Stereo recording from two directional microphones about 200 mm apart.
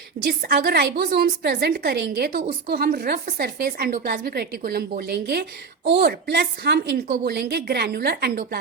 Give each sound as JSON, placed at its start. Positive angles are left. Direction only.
{"t": 0.3, "sound": "a woman's voice", "side_deg": -55}